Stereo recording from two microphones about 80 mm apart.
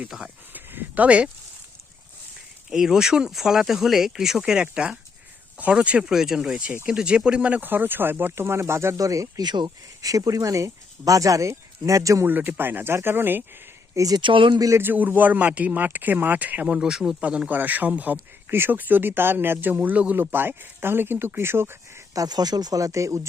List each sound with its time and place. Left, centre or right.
0.1 s speech: centre
0.5 s speech: right
2.6 s speech: centre; by 9.4 s right
9.4 s speech: right
9.6 s speech: right
12.2 s speech: right
13.9 s speech: right
14.2 s speech: right
14.8 s speech: right
22.1 s speech: right